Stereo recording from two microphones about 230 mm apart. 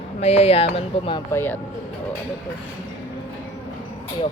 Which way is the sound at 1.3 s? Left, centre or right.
Centre.